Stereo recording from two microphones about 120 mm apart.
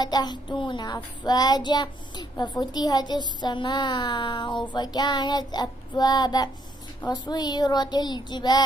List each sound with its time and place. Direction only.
0.0 s child singing: 35° left (ahead or behind)